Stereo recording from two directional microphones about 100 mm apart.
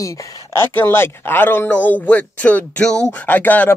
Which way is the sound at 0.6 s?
25° left (ahead or behind).